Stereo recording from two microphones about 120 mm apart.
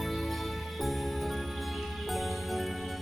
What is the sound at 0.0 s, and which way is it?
Music, centre (ahead or behind).